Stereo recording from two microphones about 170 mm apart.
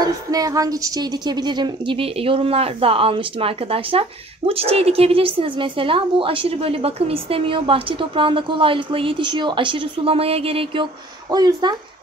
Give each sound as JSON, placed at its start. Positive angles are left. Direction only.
{"t": 0.0, "sound": "a woman's voice", "side_deg": -20}
{"t": 11.3, "sound": "speech", "side_deg": -25}